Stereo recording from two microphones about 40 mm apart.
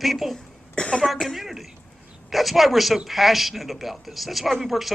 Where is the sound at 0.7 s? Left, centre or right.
Left.